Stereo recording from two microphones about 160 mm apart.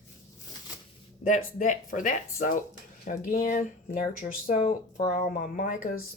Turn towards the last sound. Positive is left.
turn(degrees=60)  # may be behind; listen again after turning